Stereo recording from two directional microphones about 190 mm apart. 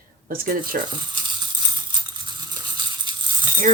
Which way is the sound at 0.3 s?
50° right (ahead or behind).